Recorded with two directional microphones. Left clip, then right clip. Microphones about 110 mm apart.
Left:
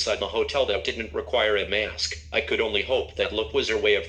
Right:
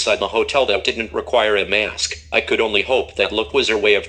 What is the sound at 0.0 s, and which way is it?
Speech, 35° right (ahead or behind).